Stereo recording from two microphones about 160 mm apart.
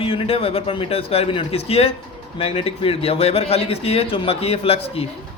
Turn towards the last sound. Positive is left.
turn(degrees=40)  # may be behind; listen again after turning